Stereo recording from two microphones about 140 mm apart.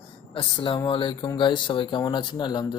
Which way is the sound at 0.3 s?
35° left (ahead or behind).